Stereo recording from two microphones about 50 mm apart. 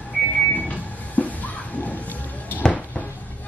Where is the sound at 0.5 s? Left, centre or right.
Left.